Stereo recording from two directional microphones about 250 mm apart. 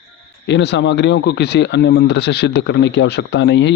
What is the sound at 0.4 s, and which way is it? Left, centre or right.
Speech, left.